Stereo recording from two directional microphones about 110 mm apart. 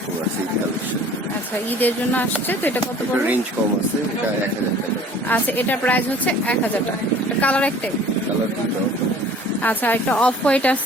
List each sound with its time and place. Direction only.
1.8 s speech: 15° left (ahead or behind)
5.3 s speech: 15° left (ahead or behind)
7.4 s speech: 10° left (ahead or behind)
9.6 s speech: 15° left (ahead or behind)